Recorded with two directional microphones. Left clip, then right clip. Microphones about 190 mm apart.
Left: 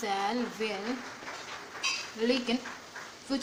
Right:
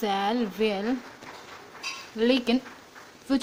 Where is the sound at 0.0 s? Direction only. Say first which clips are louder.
Right 5 dB; 50° right (ahead or behind).